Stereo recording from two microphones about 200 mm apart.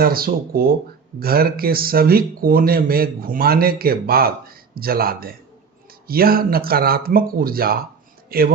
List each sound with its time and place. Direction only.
0.0 s speech: 50° right (ahead or behind)